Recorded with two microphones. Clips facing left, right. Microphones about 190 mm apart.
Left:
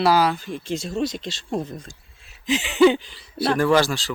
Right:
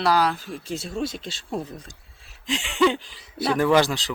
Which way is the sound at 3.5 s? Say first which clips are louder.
Even; 20° right (ahead or behind).